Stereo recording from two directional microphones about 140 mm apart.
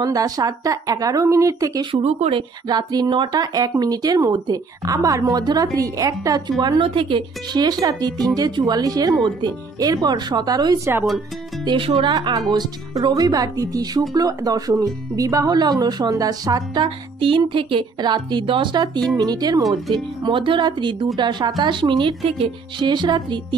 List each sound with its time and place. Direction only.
0.0 s speech: 25° right (ahead or behind)
1.9 s a woman's voice: 35° right (ahead or behind)
2.7 s a woman's voice: 30° right (ahead or behind)